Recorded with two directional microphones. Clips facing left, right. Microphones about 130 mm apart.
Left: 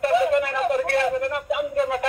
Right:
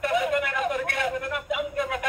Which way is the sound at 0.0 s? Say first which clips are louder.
Left 5 dB; 30° left (ahead or behind).